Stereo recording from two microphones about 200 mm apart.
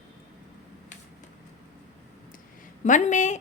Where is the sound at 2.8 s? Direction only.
40° left (ahead or behind).